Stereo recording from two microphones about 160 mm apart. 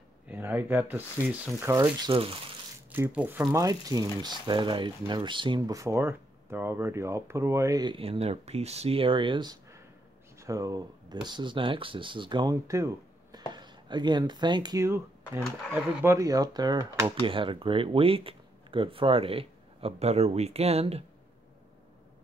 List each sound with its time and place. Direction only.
0.3 s speech: 10° right (ahead or behind)
1.7 s speech: 25° right (ahead or behind)
2.9 s speech: 10° right (ahead or behind)
15.4 s speech: centre (ahead or behind)
16.0 s speech: 20° right (ahead or behind); by 21.0 s 40° right (ahead or behind)